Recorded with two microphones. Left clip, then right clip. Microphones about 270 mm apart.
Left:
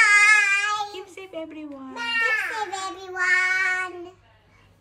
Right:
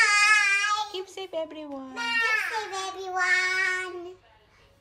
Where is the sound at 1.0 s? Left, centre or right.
Centre.